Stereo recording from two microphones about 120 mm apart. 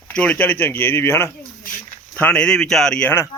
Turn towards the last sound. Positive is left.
turn(degrees=15)  # may be behind; listen again after turning